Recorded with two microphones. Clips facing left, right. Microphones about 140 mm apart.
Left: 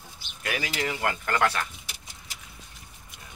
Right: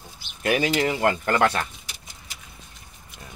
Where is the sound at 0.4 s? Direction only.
25° right (ahead or behind).